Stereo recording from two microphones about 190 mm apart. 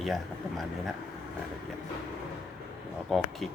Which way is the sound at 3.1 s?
Centre (ahead or behind).